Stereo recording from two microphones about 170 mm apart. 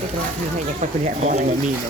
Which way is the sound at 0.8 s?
45° right (ahead or behind).